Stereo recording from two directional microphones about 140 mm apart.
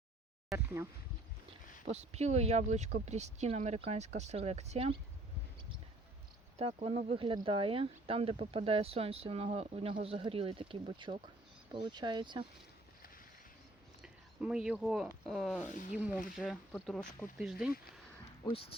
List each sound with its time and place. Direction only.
0.5 s speech: 15° right (ahead or behind)
1.8 s speech: 50° right (ahead or behind)
6.6 s speech: 45° right (ahead or behind)
14.0 s speech: 5° right (ahead or behind)